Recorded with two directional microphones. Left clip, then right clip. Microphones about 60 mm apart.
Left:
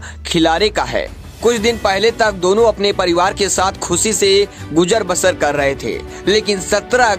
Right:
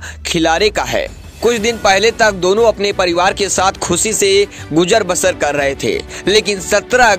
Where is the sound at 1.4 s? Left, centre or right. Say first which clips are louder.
Even; centre.